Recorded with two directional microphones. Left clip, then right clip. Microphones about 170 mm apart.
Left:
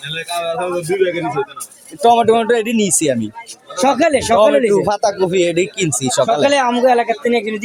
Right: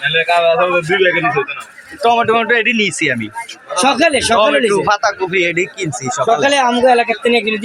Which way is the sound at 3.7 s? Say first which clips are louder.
Right 1 dB; 5° left (ahead or behind).